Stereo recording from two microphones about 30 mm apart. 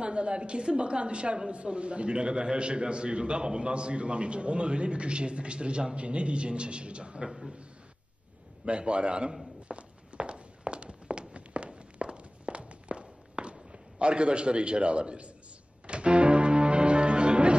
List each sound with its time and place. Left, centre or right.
0.0 s a man's voice: right
7.2 s a man's voice: centre
8.6 s a man's voice: right
9.7 s walk: right
15.9 s music: right